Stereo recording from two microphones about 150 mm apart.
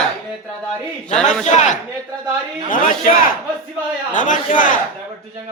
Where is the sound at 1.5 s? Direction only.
55° left (ahead or behind).